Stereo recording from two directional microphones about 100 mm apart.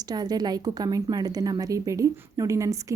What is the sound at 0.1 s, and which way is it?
A woman's voice, 45° right (ahead or behind).